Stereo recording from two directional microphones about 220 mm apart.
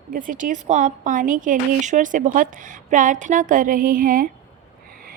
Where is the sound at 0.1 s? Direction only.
40° right (ahead or behind).